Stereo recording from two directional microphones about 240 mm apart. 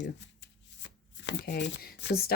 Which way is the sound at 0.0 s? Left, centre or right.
Left.